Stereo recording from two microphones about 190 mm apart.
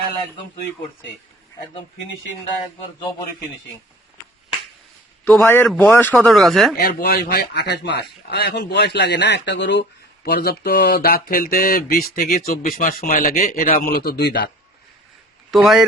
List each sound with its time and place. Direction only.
5.2 s a man's voice: 10° left (ahead or behind)
6.7 s a man's voice: 55° left (ahead or behind)
15.5 s speech: centre (ahead or behind)